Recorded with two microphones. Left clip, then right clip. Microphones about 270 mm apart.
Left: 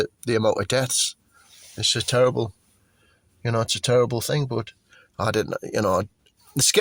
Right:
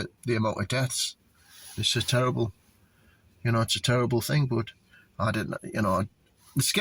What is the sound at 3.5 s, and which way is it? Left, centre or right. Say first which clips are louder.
Speech: left 4 dB; left.